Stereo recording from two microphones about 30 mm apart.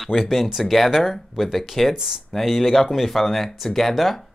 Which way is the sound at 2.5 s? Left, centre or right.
Centre.